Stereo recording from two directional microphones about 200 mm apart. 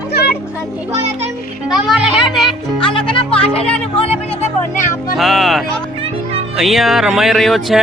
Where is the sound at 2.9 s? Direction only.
25° left (ahead or behind).